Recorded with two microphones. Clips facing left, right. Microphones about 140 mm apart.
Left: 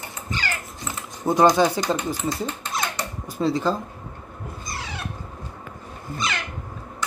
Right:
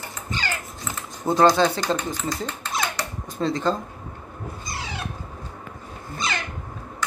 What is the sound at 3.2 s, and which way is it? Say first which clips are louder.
Speech: left 1 dB; 5° left (ahead or behind).